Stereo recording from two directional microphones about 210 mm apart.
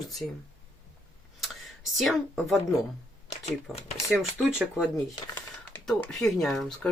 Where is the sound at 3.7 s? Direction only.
5° right (ahead or behind).